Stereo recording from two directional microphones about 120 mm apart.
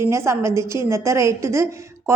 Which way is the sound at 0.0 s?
20° right (ahead or behind).